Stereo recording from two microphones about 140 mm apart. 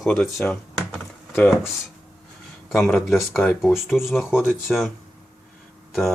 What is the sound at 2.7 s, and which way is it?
Speech, centre (ahead or behind).